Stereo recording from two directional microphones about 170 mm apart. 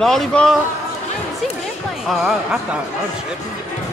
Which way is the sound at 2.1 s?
Centre (ahead or behind).